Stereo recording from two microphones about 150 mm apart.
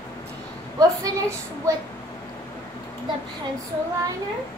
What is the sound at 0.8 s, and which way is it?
Speech, 20° right (ahead or behind).